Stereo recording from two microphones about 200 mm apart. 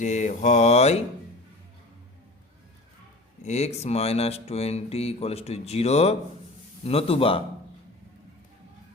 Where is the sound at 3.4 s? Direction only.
35° left (ahead or behind).